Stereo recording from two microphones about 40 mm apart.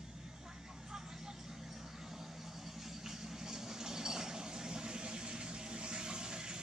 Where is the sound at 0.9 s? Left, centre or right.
Centre.